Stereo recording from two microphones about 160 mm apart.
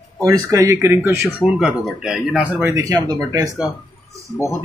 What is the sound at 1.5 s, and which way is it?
Speech, 5° right (ahead or behind).